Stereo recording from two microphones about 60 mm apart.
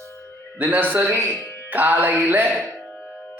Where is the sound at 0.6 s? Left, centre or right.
Right.